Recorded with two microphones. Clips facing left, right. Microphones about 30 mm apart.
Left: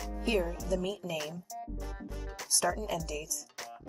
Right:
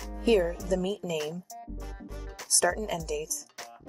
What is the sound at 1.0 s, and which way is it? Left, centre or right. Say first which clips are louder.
Speech: right 4 dB; left.